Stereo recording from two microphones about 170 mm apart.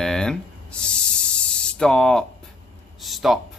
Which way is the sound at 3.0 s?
Centre (ahead or behind).